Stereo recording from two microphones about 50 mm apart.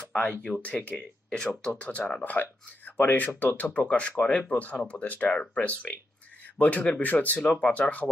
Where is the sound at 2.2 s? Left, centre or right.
Left.